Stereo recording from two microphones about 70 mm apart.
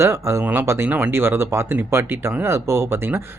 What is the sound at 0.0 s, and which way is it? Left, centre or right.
Speech, right.